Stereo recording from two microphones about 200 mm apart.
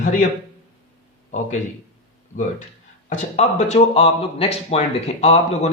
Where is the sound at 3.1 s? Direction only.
35° left (ahead or behind).